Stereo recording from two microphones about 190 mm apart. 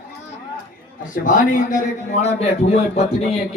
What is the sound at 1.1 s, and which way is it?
Speech, 45° left (ahead or behind).